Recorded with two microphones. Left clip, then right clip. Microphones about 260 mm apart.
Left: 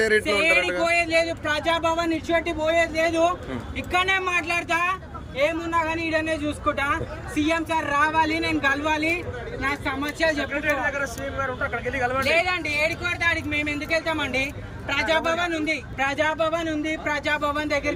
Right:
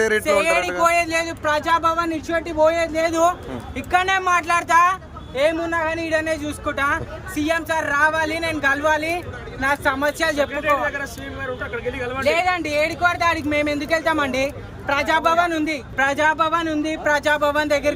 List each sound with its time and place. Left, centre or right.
0.0 s speech: centre